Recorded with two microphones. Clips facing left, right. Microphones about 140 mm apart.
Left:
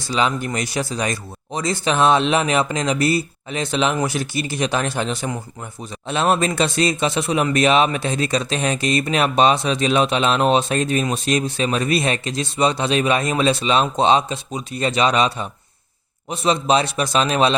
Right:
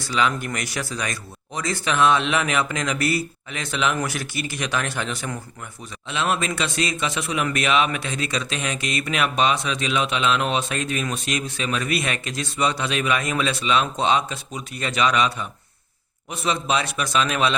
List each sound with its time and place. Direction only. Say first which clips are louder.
0.0 s a man's voice: left 2 dB; 25° left (ahead or behind)